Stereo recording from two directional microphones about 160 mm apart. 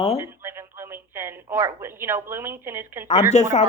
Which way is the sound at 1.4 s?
15° right (ahead or behind).